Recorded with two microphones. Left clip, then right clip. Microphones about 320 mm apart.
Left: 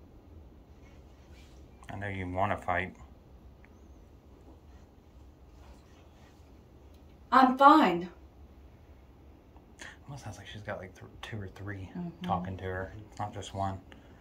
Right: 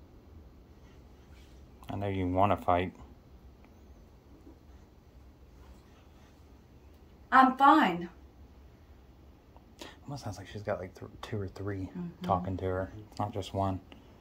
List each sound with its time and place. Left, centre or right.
1.9 s speech: right
7.3 s a woman's voice: centre
9.8 s a sound: right
10.2 s speech: centre